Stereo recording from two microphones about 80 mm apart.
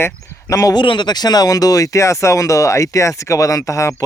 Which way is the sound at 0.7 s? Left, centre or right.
Left.